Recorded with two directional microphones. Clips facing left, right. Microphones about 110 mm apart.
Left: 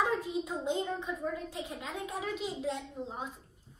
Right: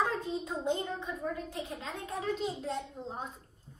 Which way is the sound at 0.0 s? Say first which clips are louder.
Left 1 dB; 10° left (ahead or behind).